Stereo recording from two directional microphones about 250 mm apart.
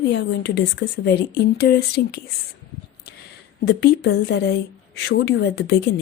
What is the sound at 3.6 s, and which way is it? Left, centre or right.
A woman's voice, left.